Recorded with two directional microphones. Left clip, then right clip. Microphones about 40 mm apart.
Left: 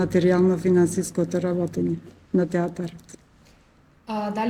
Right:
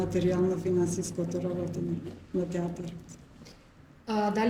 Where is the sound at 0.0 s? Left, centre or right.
Left.